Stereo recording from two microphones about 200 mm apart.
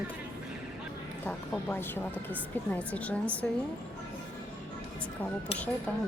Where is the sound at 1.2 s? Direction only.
10° left (ahead or behind).